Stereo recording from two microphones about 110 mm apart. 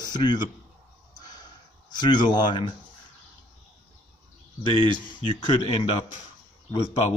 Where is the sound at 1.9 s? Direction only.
40° left (ahead or behind).